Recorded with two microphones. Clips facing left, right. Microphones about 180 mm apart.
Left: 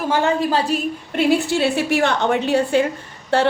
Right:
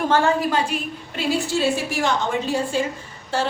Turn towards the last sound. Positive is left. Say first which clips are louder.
# left 6 dB
turn(degrees=60)  # may be behind; listen again after turning